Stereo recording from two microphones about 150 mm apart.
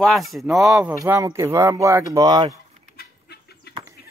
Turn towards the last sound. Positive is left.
turn(degrees=90)